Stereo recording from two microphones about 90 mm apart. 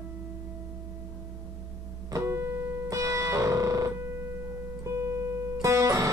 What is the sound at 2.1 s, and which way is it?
Music, 30° right (ahead or behind).